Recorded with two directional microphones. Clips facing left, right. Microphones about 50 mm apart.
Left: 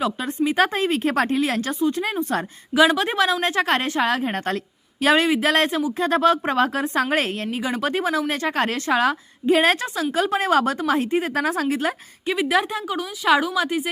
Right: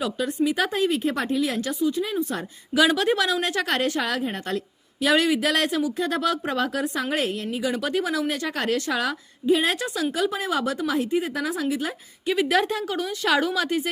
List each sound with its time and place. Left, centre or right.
0.0 s a woman's voice: left
1.0 s speech: left
2.7 s a woman's voice: left
9.5 s speech: left
9.8 s speech: left
10.8 s speech: left
12.4 s a woman's voice: centre